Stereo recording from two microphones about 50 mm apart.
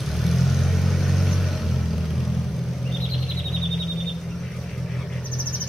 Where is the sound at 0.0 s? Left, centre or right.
Centre.